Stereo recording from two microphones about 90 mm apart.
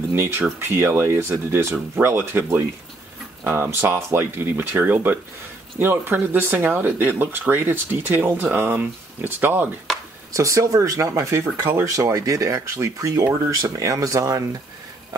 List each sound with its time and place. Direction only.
0.1 s speech: 25° right (ahead or behind)
10.3 s speech: 35° right (ahead or behind)